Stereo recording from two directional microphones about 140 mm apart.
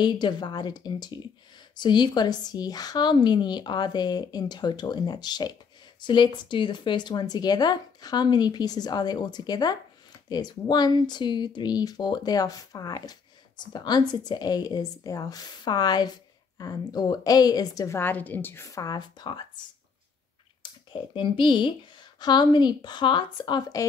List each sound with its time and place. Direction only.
0.0 s a woman's voice: 30° left (ahead or behind)
20.9 s a woman's voice: 35° left (ahead or behind)